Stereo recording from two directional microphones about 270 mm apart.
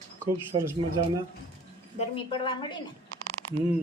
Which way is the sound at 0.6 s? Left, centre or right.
Centre.